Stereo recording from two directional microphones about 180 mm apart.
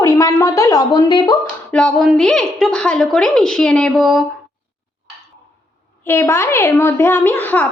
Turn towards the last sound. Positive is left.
turn(degrees=10)  # may be behind; listen again after turning